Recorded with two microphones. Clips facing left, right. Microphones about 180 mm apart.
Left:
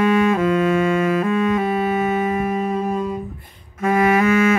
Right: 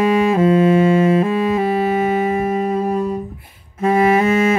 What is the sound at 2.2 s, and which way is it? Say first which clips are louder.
Music: right 3 dB; 25° right (ahead or behind).